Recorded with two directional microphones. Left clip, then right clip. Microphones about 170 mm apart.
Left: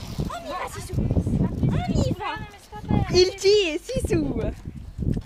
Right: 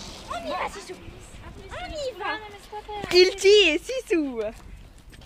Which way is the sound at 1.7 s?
55° left (ahead or behind).